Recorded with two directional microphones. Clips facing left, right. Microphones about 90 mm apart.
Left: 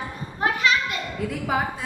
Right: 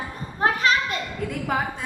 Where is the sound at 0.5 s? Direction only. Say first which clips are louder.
Right 1 dB; 40° right (ahead or behind).